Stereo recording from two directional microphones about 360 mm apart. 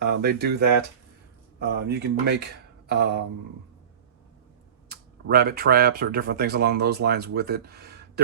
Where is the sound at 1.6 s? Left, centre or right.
Right.